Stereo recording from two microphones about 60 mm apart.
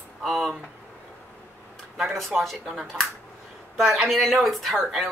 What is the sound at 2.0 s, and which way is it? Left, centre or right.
Speech, centre.